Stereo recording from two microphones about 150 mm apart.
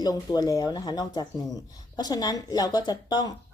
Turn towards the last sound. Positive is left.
turn(degrees=25)  # may be behind; listen again after turning